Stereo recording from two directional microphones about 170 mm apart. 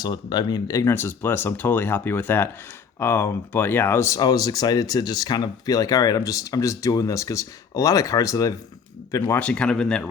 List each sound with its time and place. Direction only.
0.0 s speech: 25° left (ahead or behind); by 10.1 s 5° left (ahead or behind)